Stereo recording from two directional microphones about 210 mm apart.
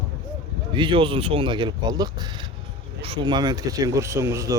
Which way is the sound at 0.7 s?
25° right (ahead or behind).